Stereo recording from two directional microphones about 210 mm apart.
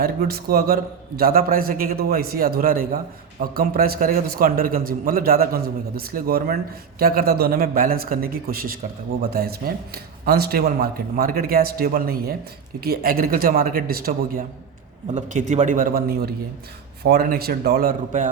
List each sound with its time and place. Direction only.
0.0 s a man's voice: 45° right (ahead or behind)